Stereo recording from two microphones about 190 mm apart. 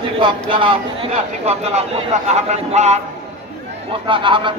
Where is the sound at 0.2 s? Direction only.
25° right (ahead or behind).